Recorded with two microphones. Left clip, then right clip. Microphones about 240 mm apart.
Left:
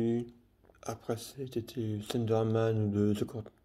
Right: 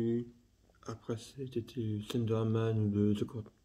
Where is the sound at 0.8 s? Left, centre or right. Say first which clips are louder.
Left 5 dB; centre.